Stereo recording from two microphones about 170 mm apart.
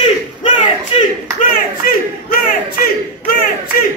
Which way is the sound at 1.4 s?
55° left (ahead or behind).